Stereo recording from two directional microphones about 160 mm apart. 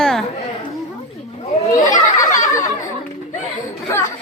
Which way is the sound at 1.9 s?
50° left (ahead or behind).